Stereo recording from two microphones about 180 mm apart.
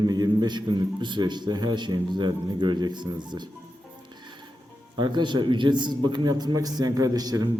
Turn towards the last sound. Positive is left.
turn(degrees=-20)  # may be behind; listen again after turning